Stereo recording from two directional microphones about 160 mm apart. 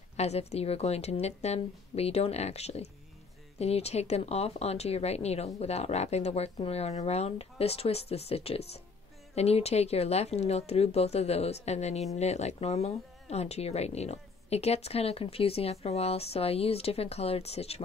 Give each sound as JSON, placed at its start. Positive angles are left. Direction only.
{"t": 0.2, "sound": "speech", "side_deg": 40}